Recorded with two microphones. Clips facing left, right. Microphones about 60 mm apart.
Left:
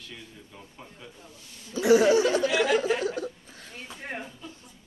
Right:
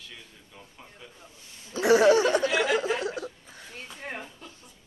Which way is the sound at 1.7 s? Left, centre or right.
Right.